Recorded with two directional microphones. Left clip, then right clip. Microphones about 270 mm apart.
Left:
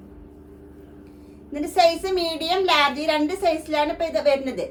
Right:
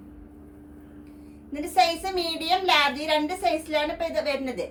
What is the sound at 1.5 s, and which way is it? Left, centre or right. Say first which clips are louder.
A child's voice: left 4 dB; centre.